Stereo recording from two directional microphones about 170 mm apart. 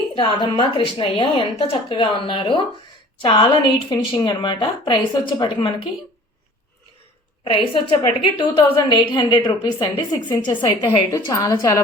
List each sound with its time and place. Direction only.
0.2 s a woman's voice: 30° left (ahead or behind)
7.4 s a woman's voice: 30° left (ahead or behind)